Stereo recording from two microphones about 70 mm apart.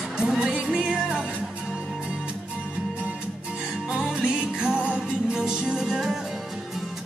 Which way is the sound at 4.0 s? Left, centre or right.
Centre.